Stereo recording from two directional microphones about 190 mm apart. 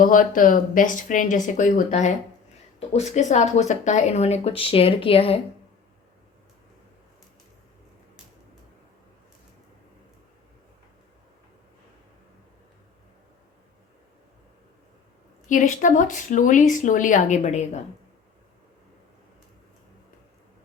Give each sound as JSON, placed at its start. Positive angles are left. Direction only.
{"t": 0.0, "sound": "speech", "side_deg": 45}
{"t": 15.4, "sound": "speech", "side_deg": 40}